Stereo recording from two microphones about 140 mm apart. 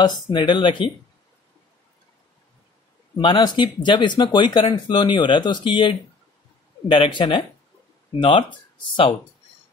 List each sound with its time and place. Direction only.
0.0 s speech: 30° left (ahead or behind)
3.2 s speech: 35° left (ahead or behind)